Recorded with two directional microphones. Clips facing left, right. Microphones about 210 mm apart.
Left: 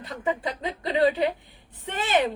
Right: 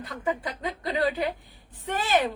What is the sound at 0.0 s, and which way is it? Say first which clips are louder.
A woman's voice: left 2 dB; 25° left (ahead or behind).